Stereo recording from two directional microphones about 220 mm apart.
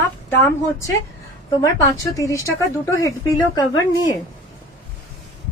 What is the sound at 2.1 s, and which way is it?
Speech, 15° left (ahead or behind).